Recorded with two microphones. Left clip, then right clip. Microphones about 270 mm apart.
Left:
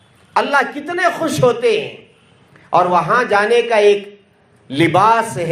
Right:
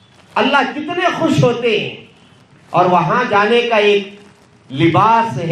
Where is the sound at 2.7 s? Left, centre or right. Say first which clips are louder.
Even; left.